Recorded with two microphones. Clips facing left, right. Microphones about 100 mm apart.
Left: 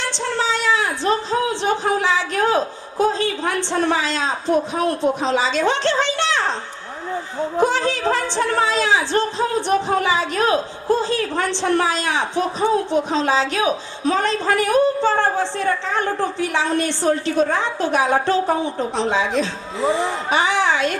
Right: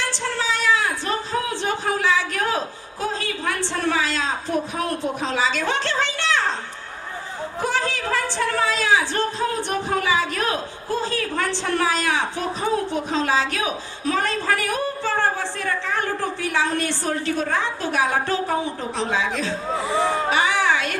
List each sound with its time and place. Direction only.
0.0 s a woman's voice: 25° left (ahead or behind)
7.6 s a woman's voice: 20° left (ahead or behind)
20.2 s a sound: 20° left (ahead or behind)